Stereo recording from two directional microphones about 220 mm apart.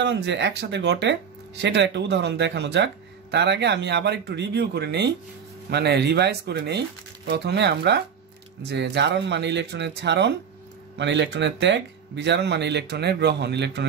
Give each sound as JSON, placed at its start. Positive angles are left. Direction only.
{"t": 0.0, "sound": "speech", "side_deg": -55}